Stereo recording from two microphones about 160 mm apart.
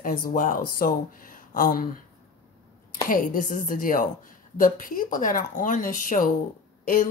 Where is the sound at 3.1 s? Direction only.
60° left (ahead or behind).